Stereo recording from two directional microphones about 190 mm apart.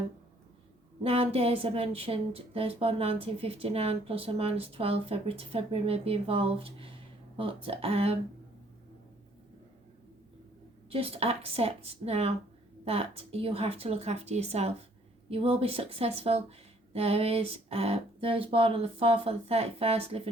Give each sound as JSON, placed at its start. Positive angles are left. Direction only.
{"t": 1.0, "sound": "speech", "side_deg": -30}
{"t": 10.8, "sound": "speech", "side_deg": -30}